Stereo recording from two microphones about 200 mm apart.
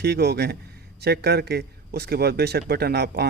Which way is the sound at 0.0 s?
55° right (ahead or behind).